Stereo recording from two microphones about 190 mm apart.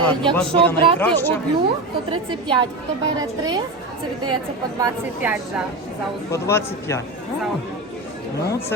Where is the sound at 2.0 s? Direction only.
25° right (ahead or behind).